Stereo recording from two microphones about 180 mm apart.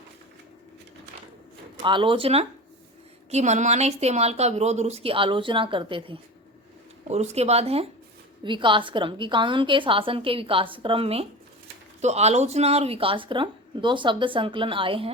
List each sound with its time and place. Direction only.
1.8 s a woman's voice: 25° right (ahead or behind)